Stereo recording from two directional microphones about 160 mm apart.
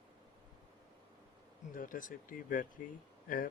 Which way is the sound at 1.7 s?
60° left (ahead or behind).